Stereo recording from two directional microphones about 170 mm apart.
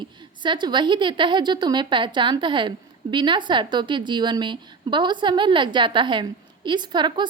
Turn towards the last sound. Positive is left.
turn(degrees=-25)  # may be behind; listen again after turning